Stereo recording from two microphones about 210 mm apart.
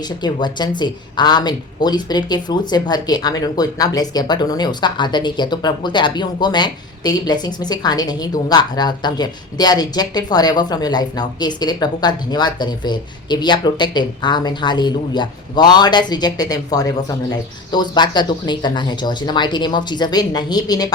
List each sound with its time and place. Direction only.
0.2 s speech: 20° left (ahead or behind)
17.7 s speech: 20° left (ahead or behind)